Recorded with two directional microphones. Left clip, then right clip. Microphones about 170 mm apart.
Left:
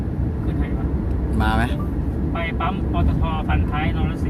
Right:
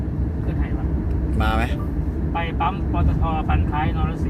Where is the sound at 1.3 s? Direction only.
15° left (ahead or behind).